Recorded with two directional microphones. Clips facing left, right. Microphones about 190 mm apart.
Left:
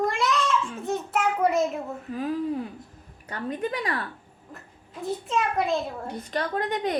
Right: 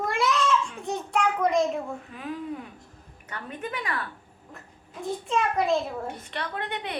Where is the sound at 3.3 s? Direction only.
35° left (ahead or behind).